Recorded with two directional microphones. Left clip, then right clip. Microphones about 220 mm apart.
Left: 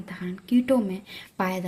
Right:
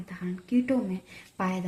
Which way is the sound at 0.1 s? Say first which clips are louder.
Left 4 dB; 45° left (ahead or behind).